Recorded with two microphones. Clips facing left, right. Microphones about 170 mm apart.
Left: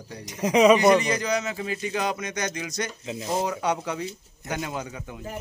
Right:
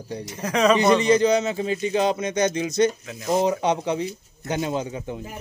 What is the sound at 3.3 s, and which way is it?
A man's voice, 20° right (ahead or behind).